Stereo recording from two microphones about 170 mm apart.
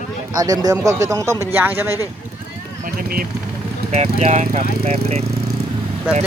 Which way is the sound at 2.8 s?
60° right (ahead or behind).